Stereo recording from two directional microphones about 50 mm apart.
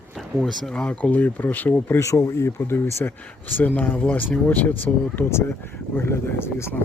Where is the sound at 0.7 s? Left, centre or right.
Left.